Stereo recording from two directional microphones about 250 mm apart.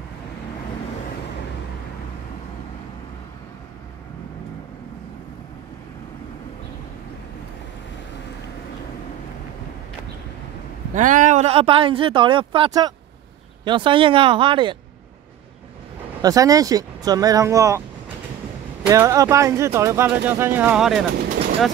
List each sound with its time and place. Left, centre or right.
11.0 s speech: right
16.2 s speech: centre